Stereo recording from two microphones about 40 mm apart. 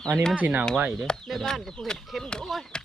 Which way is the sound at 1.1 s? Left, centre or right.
Centre.